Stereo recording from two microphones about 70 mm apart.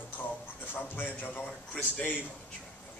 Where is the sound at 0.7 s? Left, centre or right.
Left.